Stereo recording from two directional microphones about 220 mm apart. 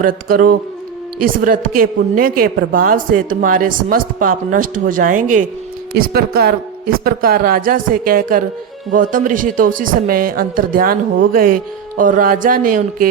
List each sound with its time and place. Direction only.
0.0 s a woman's voice: 40° right (ahead or behind)